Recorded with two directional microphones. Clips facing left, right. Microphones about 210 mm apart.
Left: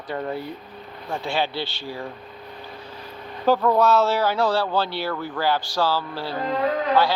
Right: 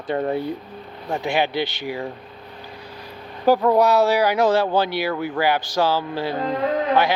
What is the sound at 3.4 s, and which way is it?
A man's voice, 15° right (ahead or behind).